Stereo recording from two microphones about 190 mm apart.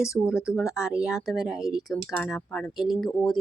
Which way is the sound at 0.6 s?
15° left (ahead or behind).